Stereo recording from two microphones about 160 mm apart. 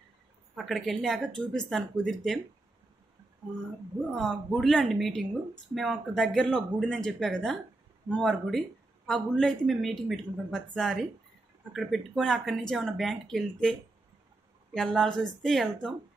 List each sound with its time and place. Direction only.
0.6 s a woman's voice: centre (ahead or behind)
4.1 s a woman's voice: 5° left (ahead or behind)